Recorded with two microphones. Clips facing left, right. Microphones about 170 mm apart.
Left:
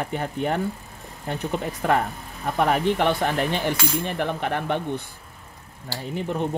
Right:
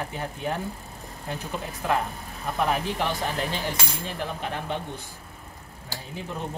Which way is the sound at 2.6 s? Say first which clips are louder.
Left 6 dB; 65° left (ahead or behind).